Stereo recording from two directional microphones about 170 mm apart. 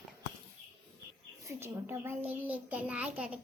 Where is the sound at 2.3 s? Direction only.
10° right (ahead or behind).